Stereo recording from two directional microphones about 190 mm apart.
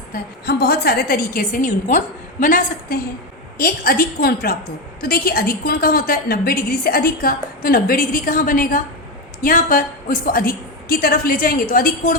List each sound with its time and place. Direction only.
0.1 s a woman's voice: 55° left (ahead or behind)